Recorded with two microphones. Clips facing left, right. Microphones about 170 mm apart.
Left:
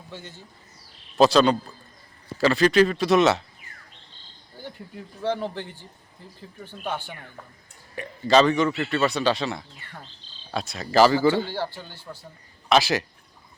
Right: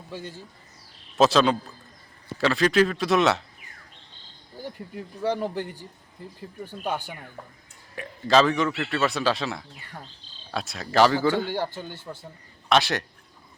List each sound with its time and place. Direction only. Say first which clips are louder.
0.1 s speech: right 4 dB; 10° right (ahead or behind)
1.1 s speech: left 2 dB; centre (ahead or behind)
4.6 s speech: right 3 dB; 10° right (ahead or behind)
7.9 s speech: left 2 dB; centre (ahead or behind)
11.4 s speech: right 2 dB; 15° right (ahead or behind)
12.6 s speech: left 2 dB; centre (ahead or behind)